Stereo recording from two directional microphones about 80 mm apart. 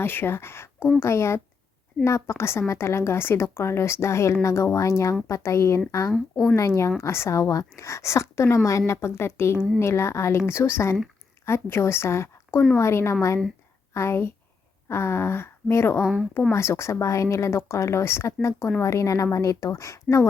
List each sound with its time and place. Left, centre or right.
0.0 s a woman's voice: left
6.1 s speech: centre
6.6 s a woman's voice: left